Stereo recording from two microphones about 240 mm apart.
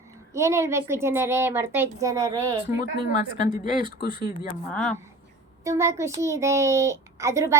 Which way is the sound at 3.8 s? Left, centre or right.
Centre.